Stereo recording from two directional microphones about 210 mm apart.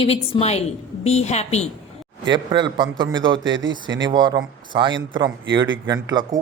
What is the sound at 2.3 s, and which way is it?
Speech, 25° right (ahead or behind).